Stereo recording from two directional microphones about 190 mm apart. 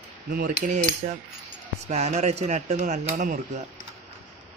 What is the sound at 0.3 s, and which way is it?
Mechanisms, 45° right (ahead or behind).